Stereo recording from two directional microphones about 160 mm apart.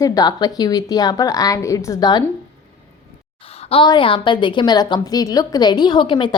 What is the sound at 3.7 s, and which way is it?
A woman's voice, 30° left (ahead or behind).